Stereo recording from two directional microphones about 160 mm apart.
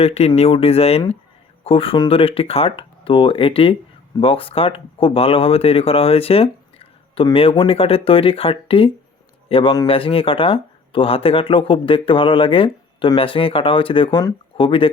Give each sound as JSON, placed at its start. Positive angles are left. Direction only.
{"t": 0.0, "sound": "speech", "side_deg": 40}